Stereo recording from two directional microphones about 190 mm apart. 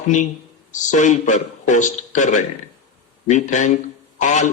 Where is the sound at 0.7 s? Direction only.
40° left (ahead or behind).